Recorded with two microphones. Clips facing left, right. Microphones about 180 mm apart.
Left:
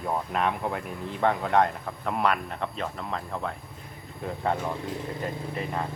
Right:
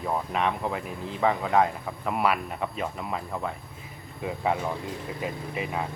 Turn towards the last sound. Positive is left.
turn(degrees=-5)  # may be behind; listen again after turning